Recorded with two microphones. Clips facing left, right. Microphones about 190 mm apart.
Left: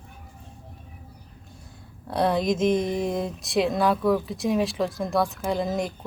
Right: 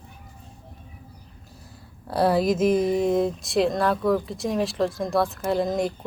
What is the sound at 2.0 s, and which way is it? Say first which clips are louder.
Speech: right 2 dB; 5° right (ahead or behind).